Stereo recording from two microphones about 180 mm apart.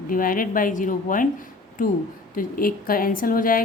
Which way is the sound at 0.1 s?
50° left (ahead or behind).